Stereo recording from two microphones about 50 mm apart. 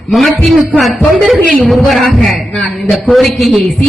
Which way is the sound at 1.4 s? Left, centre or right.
Left.